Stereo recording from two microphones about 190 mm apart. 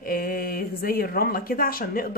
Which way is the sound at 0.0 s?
50° left (ahead or behind).